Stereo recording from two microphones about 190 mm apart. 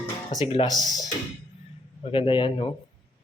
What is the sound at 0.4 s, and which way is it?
Speech, 25° left (ahead or behind).